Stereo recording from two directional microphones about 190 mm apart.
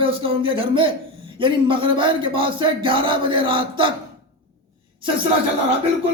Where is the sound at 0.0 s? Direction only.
30° right (ahead or behind).